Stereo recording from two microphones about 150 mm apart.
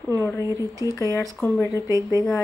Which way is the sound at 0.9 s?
20° left (ahead or behind).